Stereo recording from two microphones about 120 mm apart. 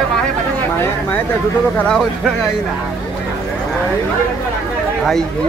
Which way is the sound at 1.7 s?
5° left (ahead or behind).